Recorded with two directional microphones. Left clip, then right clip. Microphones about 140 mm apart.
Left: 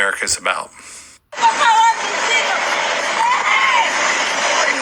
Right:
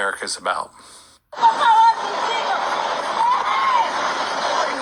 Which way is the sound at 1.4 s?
45° left (ahead or behind).